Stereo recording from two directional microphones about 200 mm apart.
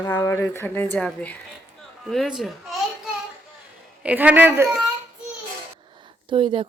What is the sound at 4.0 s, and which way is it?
Speech, 5° right (ahead or behind).